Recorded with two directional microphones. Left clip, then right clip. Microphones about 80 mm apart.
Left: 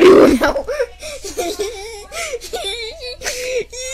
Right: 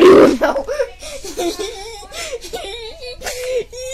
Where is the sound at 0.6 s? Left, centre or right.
Left.